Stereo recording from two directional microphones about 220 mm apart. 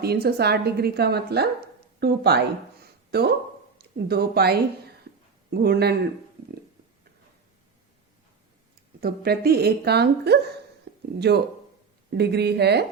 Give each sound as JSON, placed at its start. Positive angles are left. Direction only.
{"t": 0.0, "sound": "speech", "side_deg": -45}
{"t": 9.0, "sound": "speech", "side_deg": -45}
{"t": 10.9, "sound": "a sound", "side_deg": -55}
{"t": 11.2, "sound": "speech", "side_deg": -50}